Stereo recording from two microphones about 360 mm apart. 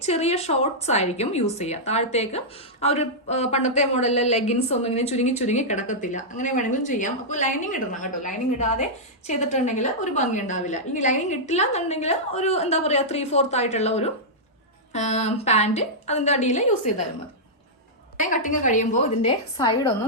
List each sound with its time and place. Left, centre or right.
0.0 s a woman's voice: centre
18.2 s speech: left